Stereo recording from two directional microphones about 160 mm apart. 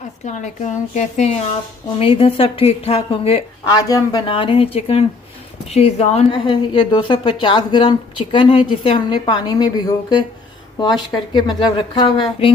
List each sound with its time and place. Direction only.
0.3 s a woman's voice: 50° left (ahead or behind)
3.7 s a woman's voice: 25° left (ahead or behind)
11.3 s a woman's voice: 25° left (ahead or behind)